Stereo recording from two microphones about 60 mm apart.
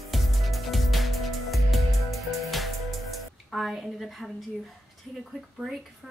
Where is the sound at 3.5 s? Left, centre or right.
Centre.